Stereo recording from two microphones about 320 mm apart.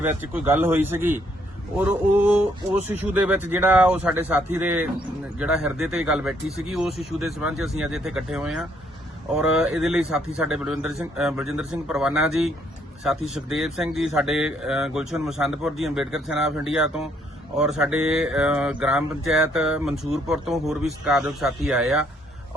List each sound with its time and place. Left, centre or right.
0.0 s a man's voice: centre